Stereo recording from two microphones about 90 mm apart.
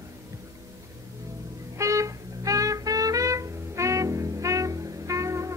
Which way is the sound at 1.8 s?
35° right (ahead or behind).